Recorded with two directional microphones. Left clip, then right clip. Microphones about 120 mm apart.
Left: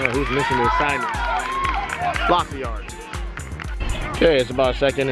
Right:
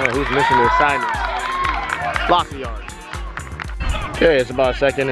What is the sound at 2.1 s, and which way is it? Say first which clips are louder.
Speech: right 3 dB; 25° right (ahead or behind).